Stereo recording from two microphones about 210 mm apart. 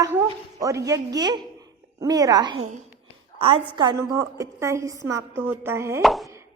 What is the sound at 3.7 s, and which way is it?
A woman's voice, 20° right (ahead or behind).